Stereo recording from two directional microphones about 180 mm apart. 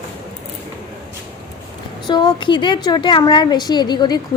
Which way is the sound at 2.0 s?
25° left (ahead or behind).